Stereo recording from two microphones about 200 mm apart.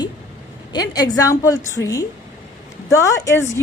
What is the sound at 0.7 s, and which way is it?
A woman's voice, 20° left (ahead or behind).